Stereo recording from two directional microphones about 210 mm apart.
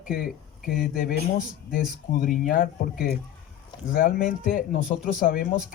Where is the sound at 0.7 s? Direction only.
45° left (ahead or behind).